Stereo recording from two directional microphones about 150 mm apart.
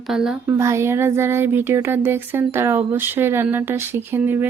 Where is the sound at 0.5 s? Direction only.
20° right (ahead or behind).